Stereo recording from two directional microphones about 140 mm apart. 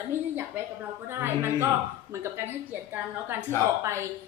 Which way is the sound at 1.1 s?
20° right (ahead or behind).